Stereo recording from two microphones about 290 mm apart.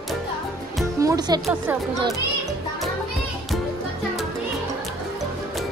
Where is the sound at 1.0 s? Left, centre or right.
Centre.